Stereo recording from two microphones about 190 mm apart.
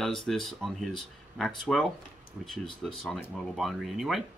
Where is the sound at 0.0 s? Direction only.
5° left (ahead or behind).